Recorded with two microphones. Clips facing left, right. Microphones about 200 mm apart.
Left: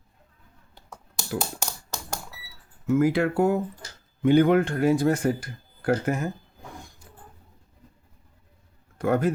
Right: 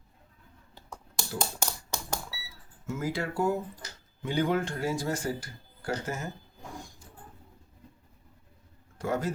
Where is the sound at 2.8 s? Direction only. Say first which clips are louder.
Left 11 dB; 60° left (ahead or behind).